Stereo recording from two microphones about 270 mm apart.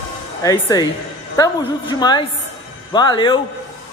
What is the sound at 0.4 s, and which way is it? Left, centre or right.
Speech, centre.